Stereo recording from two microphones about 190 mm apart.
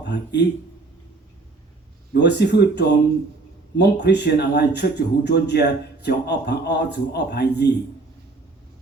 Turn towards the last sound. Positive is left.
turn(degrees=60)  # may be behind; listen again after turning